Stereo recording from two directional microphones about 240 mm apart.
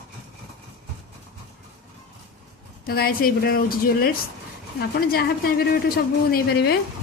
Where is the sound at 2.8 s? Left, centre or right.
Left.